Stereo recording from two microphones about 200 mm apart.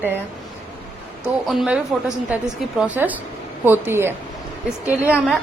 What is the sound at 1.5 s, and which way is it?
A woman's voice, centre (ahead or behind).